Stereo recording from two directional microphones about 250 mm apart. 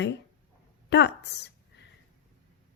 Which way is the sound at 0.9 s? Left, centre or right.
Left.